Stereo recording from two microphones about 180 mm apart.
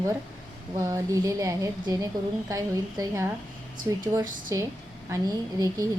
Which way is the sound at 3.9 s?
15° right (ahead or behind).